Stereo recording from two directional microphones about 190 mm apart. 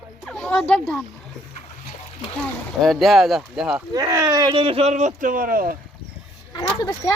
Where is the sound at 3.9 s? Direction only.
20° right (ahead or behind); by 5.7 s 50° right (ahead or behind).